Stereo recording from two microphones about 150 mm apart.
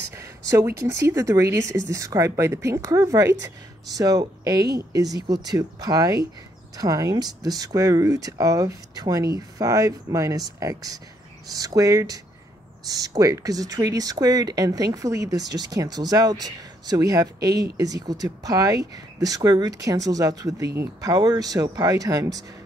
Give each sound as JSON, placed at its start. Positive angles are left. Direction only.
{"t": 0.1, "sound": "speech", "side_deg": -20}